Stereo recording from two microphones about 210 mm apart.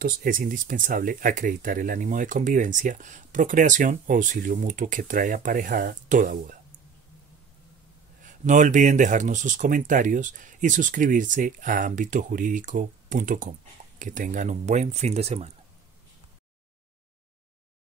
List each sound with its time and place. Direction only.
0.0 s speech: 45° right (ahead or behind)
8.2 s speech: 35° right (ahead or behind)